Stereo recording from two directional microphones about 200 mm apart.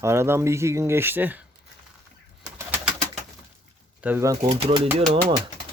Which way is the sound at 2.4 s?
15° right (ahead or behind).